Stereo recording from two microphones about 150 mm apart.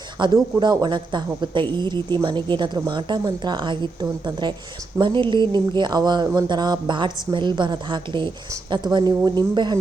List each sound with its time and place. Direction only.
0.2 s speech: 30° right (ahead or behind)